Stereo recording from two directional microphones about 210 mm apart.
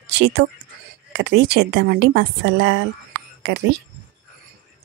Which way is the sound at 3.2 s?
55° right (ahead or behind).